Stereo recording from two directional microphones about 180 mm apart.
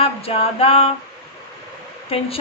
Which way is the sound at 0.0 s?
30° left (ahead or behind).